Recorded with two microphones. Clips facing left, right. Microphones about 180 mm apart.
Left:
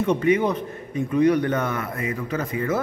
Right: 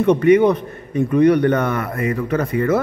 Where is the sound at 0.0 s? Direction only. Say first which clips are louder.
Right 7 dB; 65° right (ahead or behind).